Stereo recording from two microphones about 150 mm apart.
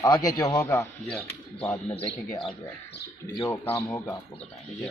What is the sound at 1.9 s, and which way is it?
Speech, 35° left (ahead or behind).